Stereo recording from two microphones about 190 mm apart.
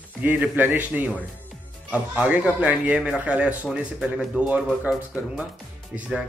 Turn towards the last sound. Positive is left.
turn(degrees=-5)  # may be behind; listen again after turning